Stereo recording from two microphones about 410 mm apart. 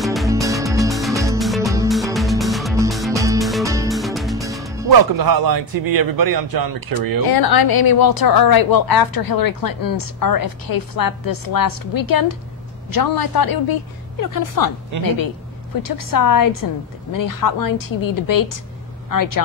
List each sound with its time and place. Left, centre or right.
0.0 s music: centre
4.9 s a man's voice: right
7.2 s a woman's voice: left
14.2 s a woman's voice: left
15.8 s a woman's voice: left